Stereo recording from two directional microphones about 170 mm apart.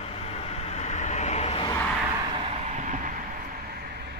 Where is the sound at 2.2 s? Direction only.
30° right (ahead or behind); by 3.1 s 50° right (ahead or behind).